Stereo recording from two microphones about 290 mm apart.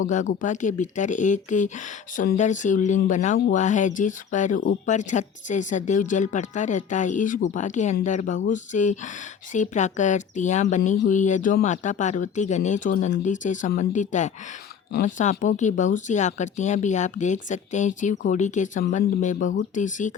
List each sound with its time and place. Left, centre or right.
0.1 s speech: left